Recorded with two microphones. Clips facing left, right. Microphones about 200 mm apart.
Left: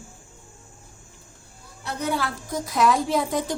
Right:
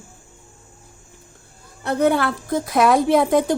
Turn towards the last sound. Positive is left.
turn(degrees=-55)  # may be behind; listen again after turning